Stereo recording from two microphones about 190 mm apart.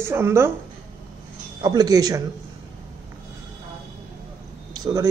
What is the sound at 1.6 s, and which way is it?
Speech, 20° right (ahead or behind).